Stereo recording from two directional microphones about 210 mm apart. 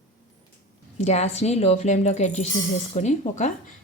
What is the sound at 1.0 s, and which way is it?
Speech, 30° left (ahead or behind).